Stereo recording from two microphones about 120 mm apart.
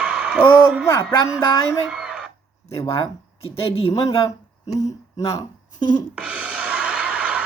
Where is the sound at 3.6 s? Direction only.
55° left (ahead or behind).